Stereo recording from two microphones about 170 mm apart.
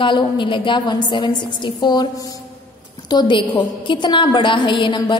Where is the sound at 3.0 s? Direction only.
25° left (ahead or behind).